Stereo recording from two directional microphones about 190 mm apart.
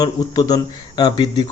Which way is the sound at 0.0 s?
20° left (ahead or behind).